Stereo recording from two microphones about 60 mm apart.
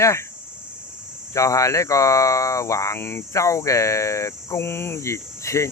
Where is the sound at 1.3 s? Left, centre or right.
Left.